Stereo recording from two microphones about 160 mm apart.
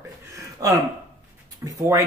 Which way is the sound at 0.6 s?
20° right (ahead or behind).